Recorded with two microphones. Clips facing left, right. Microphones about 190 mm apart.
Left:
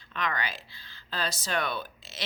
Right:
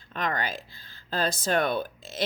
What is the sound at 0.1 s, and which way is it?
A woman's voice, 45° right (ahead or behind).